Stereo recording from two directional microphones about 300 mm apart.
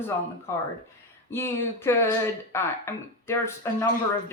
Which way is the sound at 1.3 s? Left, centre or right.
Centre.